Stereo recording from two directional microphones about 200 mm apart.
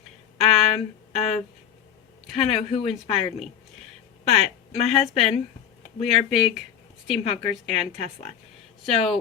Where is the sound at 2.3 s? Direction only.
30° left (ahead or behind).